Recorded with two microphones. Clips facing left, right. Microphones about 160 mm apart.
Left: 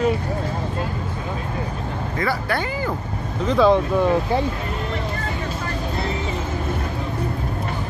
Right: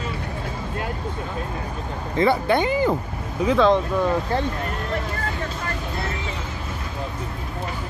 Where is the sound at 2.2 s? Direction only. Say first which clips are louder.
Right 6 dB; 20° right (ahead or behind).